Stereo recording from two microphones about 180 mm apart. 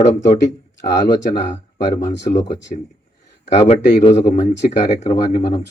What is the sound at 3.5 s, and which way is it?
Speech, 35° left (ahead or behind).